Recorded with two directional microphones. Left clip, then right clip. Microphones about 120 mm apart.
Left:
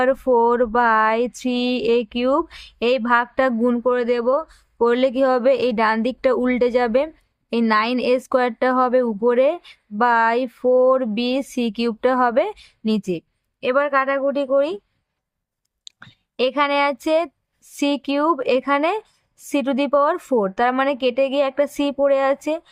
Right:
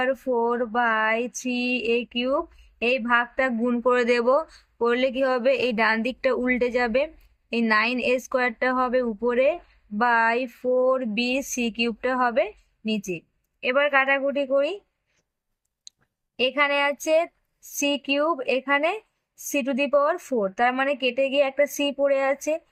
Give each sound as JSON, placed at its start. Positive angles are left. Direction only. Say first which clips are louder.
{"t": 0.0, "sound": "speech", "louder": "left 7 dB", "side_deg": 75}
{"t": 3.8, "sound": "speech", "louder": "right 1 dB", "side_deg": 30}
{"t": 4.8, "sound": "speech", "louder": "left 5 dB", "side_deg": 60}
{"t": 16.4, "sound": "speech", "louder": "left 3 dB", "side_deg": 55}